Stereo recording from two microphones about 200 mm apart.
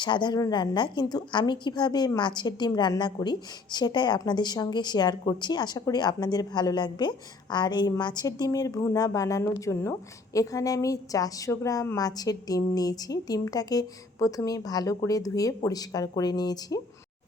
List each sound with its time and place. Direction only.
0.0 s a woman's voice: 20° left (ahead or behind)